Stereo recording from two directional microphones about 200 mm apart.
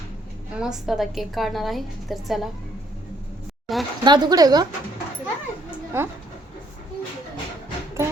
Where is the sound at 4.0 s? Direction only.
20° right (ahead or behind).